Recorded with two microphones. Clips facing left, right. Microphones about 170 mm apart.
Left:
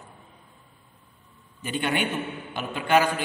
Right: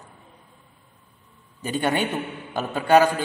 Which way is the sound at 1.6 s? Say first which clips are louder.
Right 3 dB; 40° right (ahead or behind).